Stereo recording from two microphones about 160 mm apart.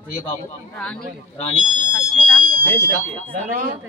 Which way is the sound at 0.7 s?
5° left (ahead or behind).